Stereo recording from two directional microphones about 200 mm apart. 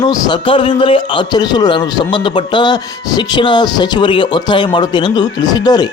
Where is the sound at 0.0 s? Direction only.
20° left (ahead or behind).